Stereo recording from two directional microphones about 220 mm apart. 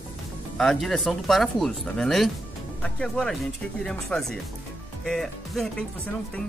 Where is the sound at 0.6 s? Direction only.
Centre (ahead or behind).